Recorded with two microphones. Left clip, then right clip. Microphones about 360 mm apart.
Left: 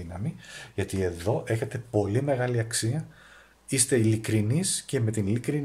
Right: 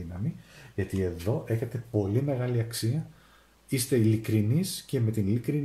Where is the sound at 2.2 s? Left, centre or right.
Centre.